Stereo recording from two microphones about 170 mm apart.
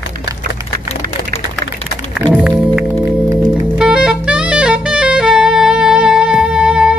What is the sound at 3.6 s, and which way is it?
Saxophone, 5° right (ahead or behind).